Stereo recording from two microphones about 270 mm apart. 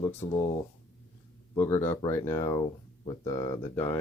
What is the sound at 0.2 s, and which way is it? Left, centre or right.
Speech, centre.